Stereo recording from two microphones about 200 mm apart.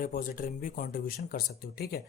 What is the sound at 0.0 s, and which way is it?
Speech, 45° left (ahead or behind).